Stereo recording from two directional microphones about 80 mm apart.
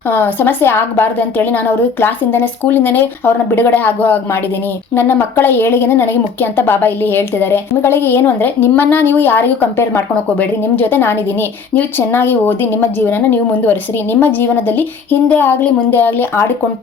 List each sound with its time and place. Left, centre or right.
0.1 s a woman's voice: left